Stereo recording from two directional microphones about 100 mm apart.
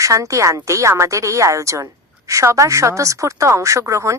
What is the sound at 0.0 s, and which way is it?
A woman's voice, 30° right (ahead or behind).